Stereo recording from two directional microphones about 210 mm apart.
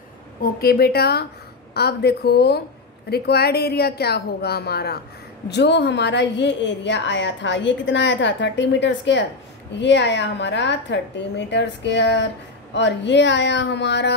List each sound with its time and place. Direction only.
0.4 s a woman's voice: 45° left (ahead or behind)